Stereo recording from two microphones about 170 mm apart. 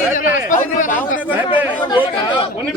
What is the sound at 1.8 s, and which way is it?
Speech, 30° left (ahead or behind).